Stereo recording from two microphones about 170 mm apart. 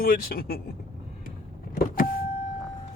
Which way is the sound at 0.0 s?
55° left (ahead or behind).